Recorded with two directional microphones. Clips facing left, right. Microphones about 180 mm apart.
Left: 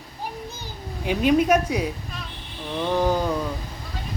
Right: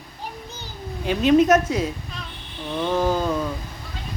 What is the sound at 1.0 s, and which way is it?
Speech, 10° left (ahead or behind).